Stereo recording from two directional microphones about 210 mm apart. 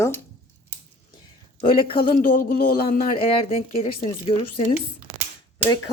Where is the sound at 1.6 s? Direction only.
25° left (ahead or behind).